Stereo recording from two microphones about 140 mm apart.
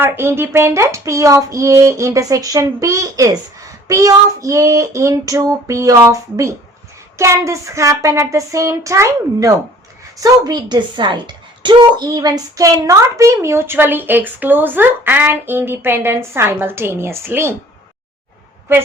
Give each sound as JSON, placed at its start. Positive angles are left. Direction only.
{"t": 0.0, "sound": "a woman's voice", "side_deg": -15}